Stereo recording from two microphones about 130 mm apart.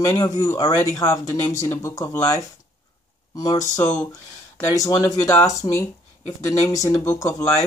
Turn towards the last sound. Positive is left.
turn(degrees=25)  # may be behind; listen again after turning